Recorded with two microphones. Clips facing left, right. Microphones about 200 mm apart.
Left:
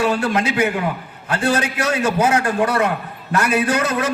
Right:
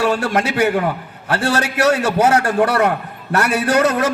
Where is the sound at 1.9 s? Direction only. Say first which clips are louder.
Right 2 dB; 40° right (ahead or behind).